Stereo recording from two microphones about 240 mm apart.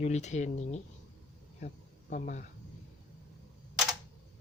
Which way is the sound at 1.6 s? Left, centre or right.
Left.